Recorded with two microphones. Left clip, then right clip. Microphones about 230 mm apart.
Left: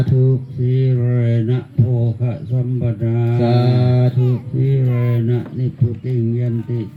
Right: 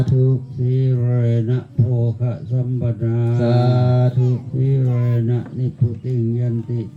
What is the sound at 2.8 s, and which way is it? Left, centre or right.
Mantra, left.